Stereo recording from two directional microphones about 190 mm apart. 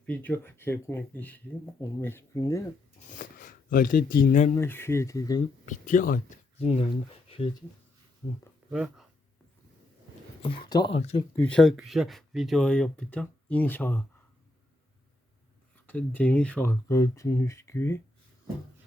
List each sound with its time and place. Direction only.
0.0 s speech: 10° left (ahead or behind)
3.1 s speech: 45° left (ahead or behind)
4.5 s speech: 10° left (ahead or behind)
5.6 s speech: 45° left (ahead or behind)
6.6 s speech: 30° left (ahead or behind)
8.7 s speech: 5° right (ahead or behind)
10.4 s speech: 25° left (ahead or behind)
10.9 s speech: 35° left (ahead or behind)
11.3 s speech: 5° left (ahead or behind)
15.9 s speech: 10° left (ahead or behind)